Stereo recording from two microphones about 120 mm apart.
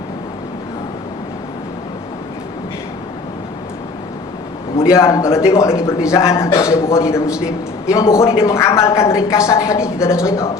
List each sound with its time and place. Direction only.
4.8 s a woman's voice: 25° left (ahead or behind)